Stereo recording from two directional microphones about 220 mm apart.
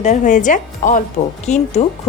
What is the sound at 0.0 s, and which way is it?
A woman's voice, 35° left (ahead or behind).